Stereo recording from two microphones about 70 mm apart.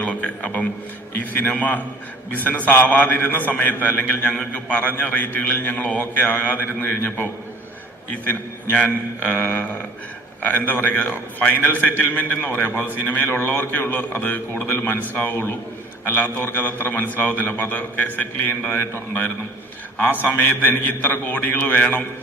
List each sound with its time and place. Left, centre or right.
0.0 s a sound: left
1.1 s a man's voice: left
8.3 s a man's voice: left